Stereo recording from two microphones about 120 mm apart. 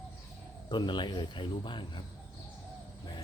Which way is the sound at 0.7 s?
40° left (ahead or behind).